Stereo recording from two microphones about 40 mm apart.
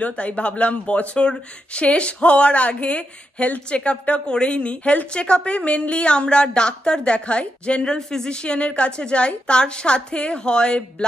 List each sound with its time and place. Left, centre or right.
0.0 s a woman's voice: left